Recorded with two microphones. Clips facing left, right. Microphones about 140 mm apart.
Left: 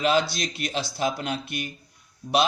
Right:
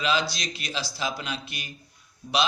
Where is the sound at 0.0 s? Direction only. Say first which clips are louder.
Left 4 dB; 50° left (ahead or behind).